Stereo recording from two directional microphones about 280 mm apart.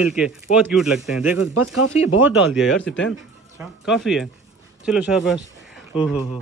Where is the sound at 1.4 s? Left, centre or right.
Left.